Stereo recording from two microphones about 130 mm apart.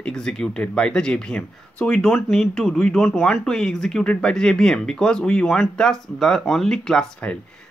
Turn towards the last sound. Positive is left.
turn(degrees=5)  # may be behind; listen again after turning